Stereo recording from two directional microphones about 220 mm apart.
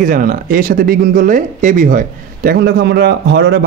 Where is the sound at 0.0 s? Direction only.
40° right (ahead or behind).